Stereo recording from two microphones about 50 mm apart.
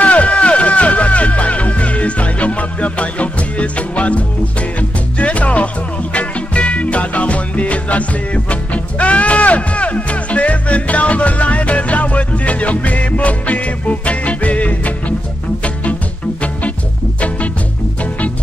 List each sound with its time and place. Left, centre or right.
0.0 s music: left